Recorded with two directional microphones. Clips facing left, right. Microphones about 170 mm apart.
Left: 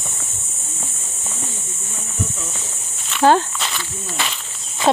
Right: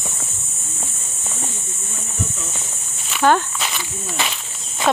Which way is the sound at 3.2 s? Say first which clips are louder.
Left 2 dB; 35° left (ahead or behind).